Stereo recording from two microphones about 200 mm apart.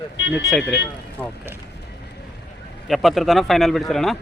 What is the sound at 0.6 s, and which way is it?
Speech, 60° left (ahead or behind).